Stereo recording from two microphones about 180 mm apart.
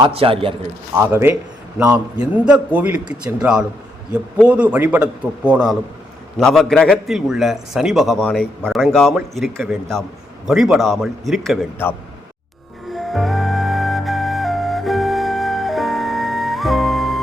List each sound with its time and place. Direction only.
0.0 s a man's voice: 30° right (ahead or behind)
0.9 s a man's voice: 10° right (ahead or behind)
13.1 s music: centre (ahead or behind)